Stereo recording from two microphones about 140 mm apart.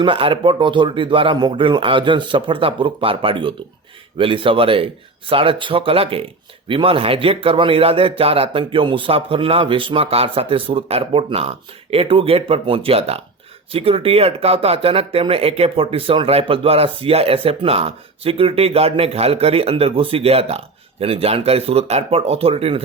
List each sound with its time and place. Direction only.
0.0 s a man's voice: 40° right (ahead or behind)